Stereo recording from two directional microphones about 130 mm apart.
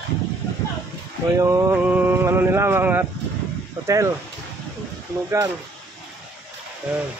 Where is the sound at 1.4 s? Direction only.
25° right (ahead or behind).